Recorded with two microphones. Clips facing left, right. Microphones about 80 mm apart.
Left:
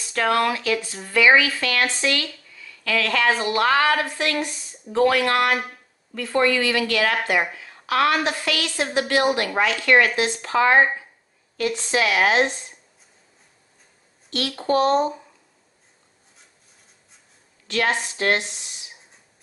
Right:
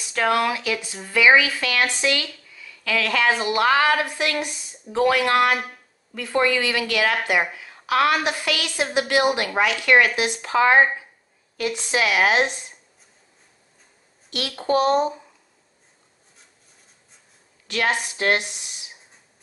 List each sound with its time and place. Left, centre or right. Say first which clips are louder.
0.0 s a woman's voice: even; centre
14.3 s speech: even; centre
17.6 s speech: left 1 dB; centre